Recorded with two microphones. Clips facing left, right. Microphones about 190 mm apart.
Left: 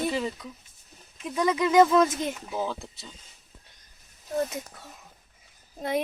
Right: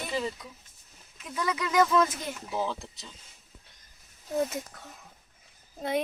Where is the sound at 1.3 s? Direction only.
20° left (ahead or behind).